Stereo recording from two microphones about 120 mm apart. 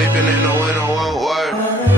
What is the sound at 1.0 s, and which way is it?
Music, centre (ahead or behind).